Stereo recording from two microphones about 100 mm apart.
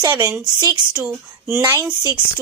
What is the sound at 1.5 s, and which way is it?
Speech, 25° right (ahead or behind).